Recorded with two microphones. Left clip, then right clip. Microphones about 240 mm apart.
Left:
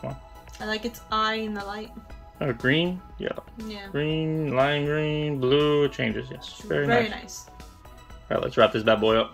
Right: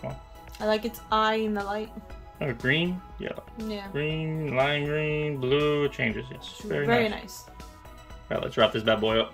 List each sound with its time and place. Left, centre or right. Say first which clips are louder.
0.6 s speech: right 4 dB; right
2.3 s speech: left 2 dB; centre
3.9 s music: left 5 dB; centre
8.3 s music: left 3 dB; centre